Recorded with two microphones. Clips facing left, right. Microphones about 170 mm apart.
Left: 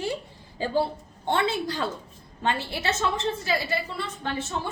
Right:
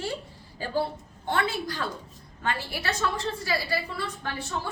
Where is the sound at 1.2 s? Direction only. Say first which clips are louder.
Left 3 dB; 25° left (ahead or behind).